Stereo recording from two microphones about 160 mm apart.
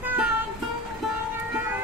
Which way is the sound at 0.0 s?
10° right (ahead or behind).